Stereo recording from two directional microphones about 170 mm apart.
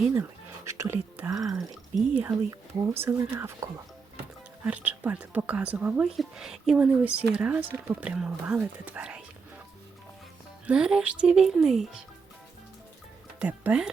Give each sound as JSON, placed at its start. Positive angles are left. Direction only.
{"t": 0.0, "sound": "speech", "side_deg": -10}
{"t": 10.7, "sound": "speech", "side_deg": -5}
{"t": 13.4, "sound": "speech", "side_deg": -10}